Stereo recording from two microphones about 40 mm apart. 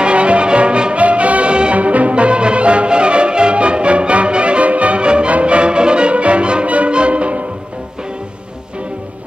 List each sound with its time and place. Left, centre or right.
0.0 s music: right